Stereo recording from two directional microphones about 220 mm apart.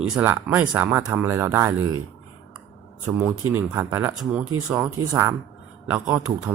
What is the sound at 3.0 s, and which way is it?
Speech, 10° right (ahead or behind).